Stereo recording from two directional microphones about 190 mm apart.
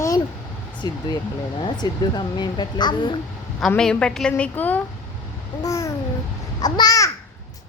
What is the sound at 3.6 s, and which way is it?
A woman's voice, 5° left (ahead or behind).